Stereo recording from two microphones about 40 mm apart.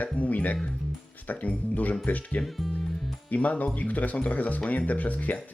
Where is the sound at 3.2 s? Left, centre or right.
Left.